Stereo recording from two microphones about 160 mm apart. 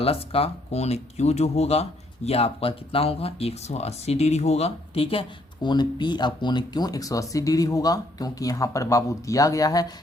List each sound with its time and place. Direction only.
0.0 s speech: 35° left (ahead or behind); by 9.8 s 20° left (ahead or behind)